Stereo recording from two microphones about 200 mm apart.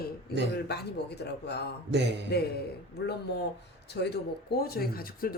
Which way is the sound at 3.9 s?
55° left (ahead or behind).